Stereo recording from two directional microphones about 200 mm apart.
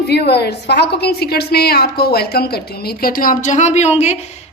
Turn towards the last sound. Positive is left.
turn(degrees=35)  # may be behind; listen again after turning